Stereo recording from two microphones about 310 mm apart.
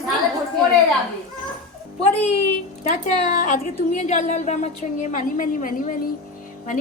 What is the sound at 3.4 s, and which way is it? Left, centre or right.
A woman's voice, left.